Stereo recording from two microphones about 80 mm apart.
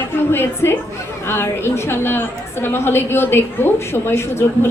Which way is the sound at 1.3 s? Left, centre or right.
Left.